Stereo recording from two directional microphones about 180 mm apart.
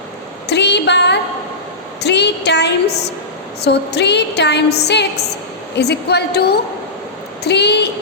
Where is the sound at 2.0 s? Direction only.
70° left (ahead or behind).